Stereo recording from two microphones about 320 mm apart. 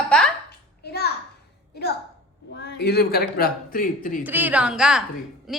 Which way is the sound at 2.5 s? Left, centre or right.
Left.